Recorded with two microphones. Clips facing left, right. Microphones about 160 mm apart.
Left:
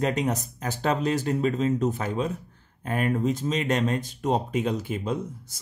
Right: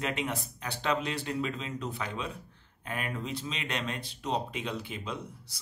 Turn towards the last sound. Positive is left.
turn(degrees=45)  # may be behind; listen again after turning